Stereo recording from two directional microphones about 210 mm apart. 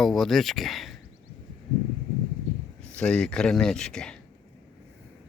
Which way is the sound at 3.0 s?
5° left (ahead or behind).